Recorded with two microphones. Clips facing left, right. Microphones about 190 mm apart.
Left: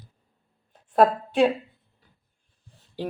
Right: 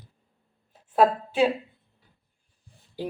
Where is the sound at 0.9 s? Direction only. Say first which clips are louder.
Left 2 dB; 5° right (ahead or behind).